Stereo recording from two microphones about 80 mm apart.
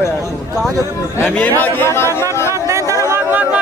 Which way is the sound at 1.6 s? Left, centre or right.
Left.